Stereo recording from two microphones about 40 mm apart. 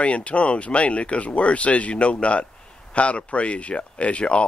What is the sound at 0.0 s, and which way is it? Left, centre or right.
Speech, left.